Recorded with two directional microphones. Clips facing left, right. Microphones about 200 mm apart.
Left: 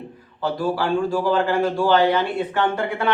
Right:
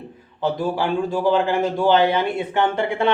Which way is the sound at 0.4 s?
20° right (ahead or behind).